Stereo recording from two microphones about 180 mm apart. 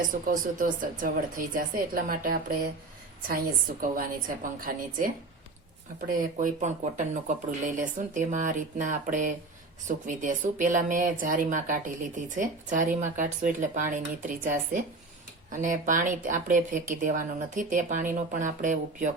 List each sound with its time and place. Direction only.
0.0 s speech: 50° right (ahead or behind)